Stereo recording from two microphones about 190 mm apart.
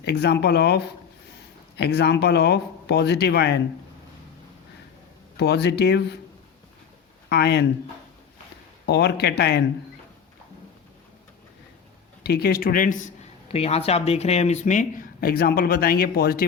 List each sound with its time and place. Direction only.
0.0 s speech: 60° left (ahead or behind)
1.8 s speech: 60° left (ahead or behind)
5.4 s speech: 60° left (ahead or behind)
7.3 s speech: 60° left (ahead or behind)
8.9 s speech: 60° left (ahead or behind)
12.2 s speech: 55° left (ahead or behind)